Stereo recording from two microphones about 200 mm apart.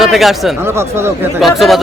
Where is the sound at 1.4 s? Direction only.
Centre (ahead or behind).